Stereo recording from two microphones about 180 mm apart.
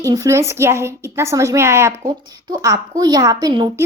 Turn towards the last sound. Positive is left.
turn(degrees=-20)  # may be behind; listen again after turning